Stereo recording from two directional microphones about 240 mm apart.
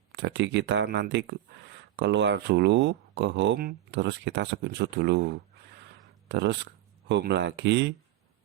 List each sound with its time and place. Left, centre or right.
0.1 s speech: right